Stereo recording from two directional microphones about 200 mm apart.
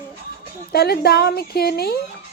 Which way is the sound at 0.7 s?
50° left (ahead or behind).